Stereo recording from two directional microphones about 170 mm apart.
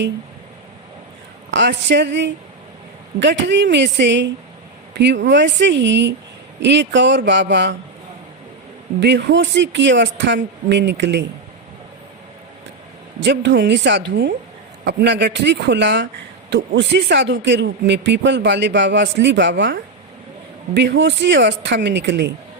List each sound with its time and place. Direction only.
1.5 s speech: 90° right
9.0 s speech: 90° right
13.2 s speech: 90° right